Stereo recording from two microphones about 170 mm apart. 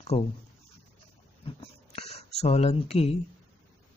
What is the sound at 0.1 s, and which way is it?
Speech, 35° left (ahead or behind).